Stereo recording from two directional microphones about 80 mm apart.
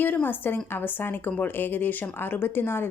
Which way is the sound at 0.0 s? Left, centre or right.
Left.